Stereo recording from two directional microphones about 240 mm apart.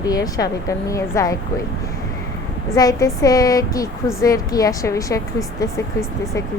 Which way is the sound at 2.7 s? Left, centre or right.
Centre.